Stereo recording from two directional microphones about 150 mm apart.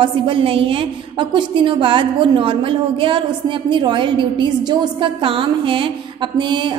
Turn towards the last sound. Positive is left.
turn(degrees=-30)  # may be behind; listen again after turning